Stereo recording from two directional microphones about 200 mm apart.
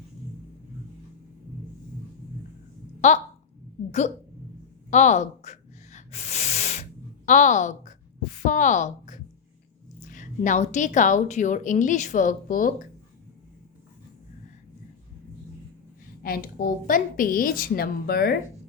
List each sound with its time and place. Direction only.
3.0 s a woman's voice: 35° left (ahead or behind)
4.9 s a sound: 35° left (ahead or behind)
7.3 s a woman's voice: 40° left (ahead or behind)
16.2 s a woman's voice: 50° left (ahead or behind)